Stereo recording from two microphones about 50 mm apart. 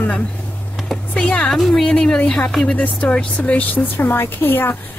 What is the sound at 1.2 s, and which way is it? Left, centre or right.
A woman's voice, centre.